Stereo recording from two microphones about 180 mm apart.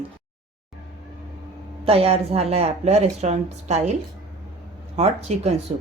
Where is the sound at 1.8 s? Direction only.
35° right (ahead or behind).